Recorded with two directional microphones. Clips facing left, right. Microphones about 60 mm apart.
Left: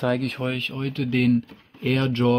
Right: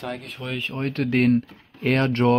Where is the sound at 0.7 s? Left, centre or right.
Right.